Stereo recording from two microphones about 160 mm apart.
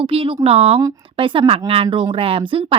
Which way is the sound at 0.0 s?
35° right (ahead or behind).